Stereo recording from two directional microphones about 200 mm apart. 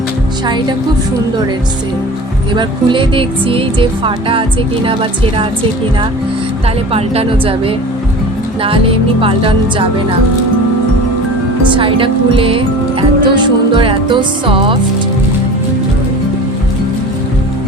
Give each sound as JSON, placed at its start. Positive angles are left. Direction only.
{"t": 2.6, "sound": "speech", "side_deg": -25}
{"t": 6.9, "sound": "speech", "side_deg": -30}
{"t": 9.2, "sound": "speech", "side_deg": -25}
{"t": 11.7, "sound": "speech", "side_deg": -25}